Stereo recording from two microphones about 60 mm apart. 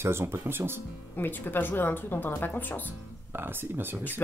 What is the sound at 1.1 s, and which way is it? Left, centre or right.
Speech, left.